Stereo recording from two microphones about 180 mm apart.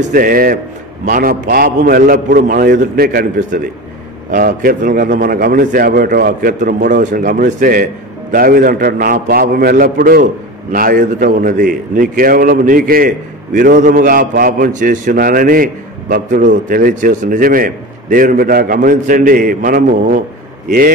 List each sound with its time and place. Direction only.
0.1 s a man's voice: 50° right (ahead or behind)